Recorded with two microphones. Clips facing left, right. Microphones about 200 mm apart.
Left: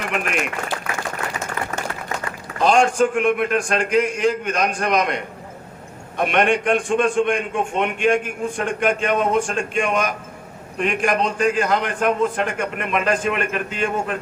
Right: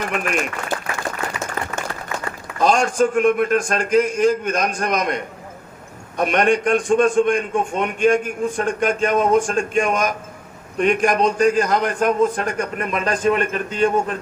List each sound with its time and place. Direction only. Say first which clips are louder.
0.0 s a man's voice: right 1 dB; 40° right (ahead or behind)